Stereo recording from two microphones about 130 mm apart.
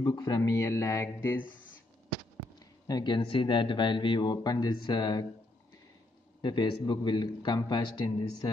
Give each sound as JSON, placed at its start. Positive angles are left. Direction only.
{"t": 0.0, "sound": "speech", "side_deg": 30}
{"t": 2.9, "sound": "speech", "side_deg": 35}
{"t": 6.4, "sound": "speech", "side_deg": 35}